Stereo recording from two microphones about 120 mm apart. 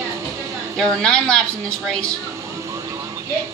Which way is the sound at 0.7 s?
5° left (ahead or behind).